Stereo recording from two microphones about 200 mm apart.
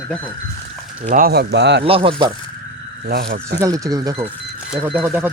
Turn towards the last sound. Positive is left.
turn(degrees=-10)  # may be behind; listen again after turning